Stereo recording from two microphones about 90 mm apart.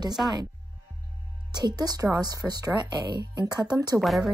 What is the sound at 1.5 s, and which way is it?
Speech, 50° right (ahead or behind).